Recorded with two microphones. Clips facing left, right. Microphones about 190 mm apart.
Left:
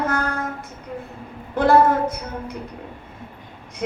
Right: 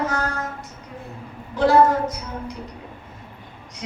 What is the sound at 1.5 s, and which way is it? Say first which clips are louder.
Speech: even; 55° left (ahead or behind).